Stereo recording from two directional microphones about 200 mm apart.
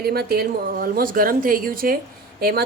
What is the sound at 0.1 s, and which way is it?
Speech, 50° right (ahead or behind).